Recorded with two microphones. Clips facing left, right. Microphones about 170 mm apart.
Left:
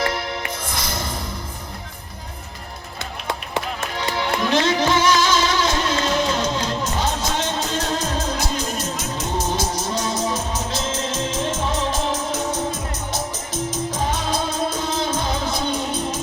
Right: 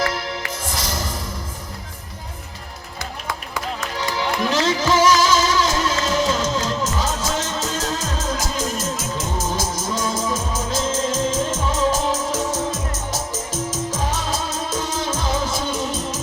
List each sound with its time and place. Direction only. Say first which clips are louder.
0.6 s music: right 1 dB; 40° right (ahead or behind)
4.4 s music: left 1 dB; 40° right (ahead or behind)
13.1 s music: even; 90° right
14.1 s music: left 2 dB; 40° right (ahead or behind)